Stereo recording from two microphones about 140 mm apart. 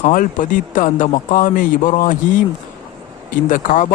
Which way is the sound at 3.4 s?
70° left (ahead or behind).